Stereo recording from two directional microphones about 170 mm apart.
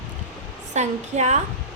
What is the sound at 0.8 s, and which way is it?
Speech, 45° right (ahead or behind).